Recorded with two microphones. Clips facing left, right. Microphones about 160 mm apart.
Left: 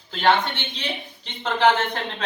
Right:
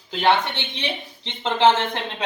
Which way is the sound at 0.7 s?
20° right (ahead or behind).